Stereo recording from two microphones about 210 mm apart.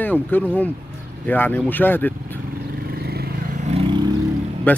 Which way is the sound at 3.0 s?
50° right (ahead or behind).